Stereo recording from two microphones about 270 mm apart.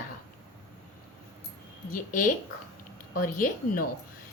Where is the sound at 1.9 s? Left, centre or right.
Left.